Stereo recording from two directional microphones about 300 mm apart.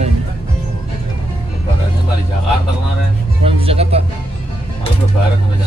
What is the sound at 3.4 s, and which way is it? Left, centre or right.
Speech, centre.